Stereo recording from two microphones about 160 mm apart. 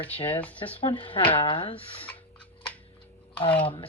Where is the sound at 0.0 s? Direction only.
35° left (ahead or behind).